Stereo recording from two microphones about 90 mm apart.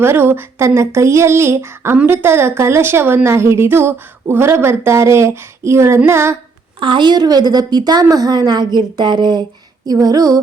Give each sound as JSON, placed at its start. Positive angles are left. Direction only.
{"t": 0.0, "sound": "speech", "side_deg": -25}
{"t": 6.7, "sound": "speech", "side_deg": -65}
{"t": 9.8, "sound": "speech", "side_deg": -45}